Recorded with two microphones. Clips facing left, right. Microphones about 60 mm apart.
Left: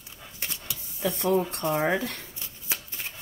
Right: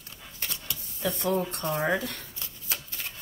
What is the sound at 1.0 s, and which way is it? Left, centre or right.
Speech, left.